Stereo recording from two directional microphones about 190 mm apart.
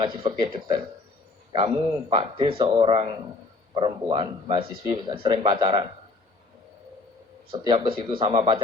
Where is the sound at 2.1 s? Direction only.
25° right (ahead or behind).